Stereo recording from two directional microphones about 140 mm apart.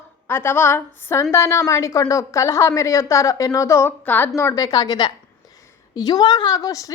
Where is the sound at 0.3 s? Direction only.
15° left (ahead or behind).